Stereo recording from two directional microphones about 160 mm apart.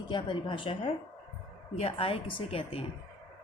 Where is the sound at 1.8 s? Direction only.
35° left (ahead or behind).